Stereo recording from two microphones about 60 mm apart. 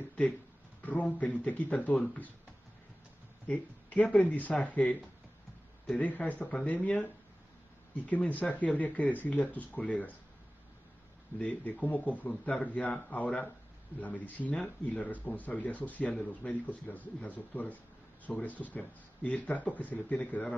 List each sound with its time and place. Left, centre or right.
0.8 s speech: left
3.4 s speech: left
5.9 s speech: left
11.3 s speech: left